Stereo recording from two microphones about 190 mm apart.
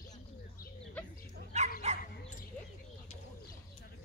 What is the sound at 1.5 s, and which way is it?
Dog, 35° right (ahead or behind).